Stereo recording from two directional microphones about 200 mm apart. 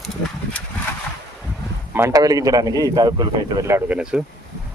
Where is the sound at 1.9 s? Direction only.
15° right (ahead or behind).